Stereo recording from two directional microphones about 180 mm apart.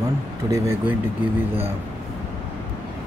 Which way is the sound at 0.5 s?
15° right (ahead or behind).